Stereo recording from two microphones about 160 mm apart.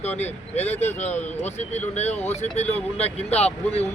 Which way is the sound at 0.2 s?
40° left (ahead or behind).